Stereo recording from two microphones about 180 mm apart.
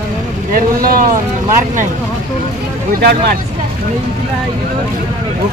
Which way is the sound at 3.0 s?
60° right (ahead or behind).